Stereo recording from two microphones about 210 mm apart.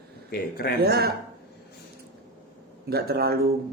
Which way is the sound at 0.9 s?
50° right (ahead or behind).